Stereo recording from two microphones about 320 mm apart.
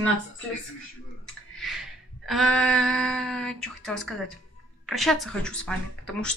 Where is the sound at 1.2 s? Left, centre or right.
Centre.